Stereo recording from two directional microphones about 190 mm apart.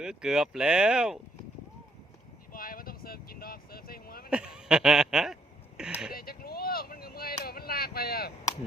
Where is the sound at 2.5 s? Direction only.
50° left (ahead or behind).